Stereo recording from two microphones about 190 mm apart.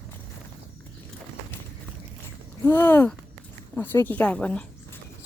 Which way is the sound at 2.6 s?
10° left (ahead or behind).